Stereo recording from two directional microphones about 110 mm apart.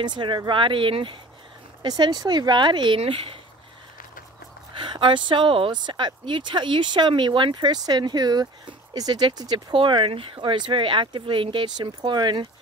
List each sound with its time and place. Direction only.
0.0 s speech: 45° right (ahead or behind)
4.7 s speech: 45° right (ahead or behind)
9.8 s speech: 50° right (ahead or behind)